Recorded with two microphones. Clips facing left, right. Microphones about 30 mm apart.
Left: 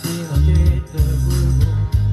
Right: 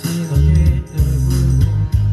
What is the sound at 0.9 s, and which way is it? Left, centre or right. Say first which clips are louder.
Music: right 2 dB; left.